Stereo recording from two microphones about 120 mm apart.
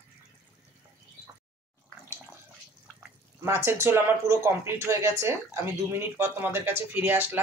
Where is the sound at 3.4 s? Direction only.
20° right (ahead or behind).